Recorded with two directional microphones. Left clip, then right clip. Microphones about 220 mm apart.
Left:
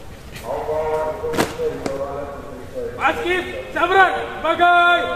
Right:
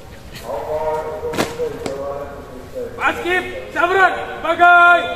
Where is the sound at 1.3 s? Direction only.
5° left (ahead or behind).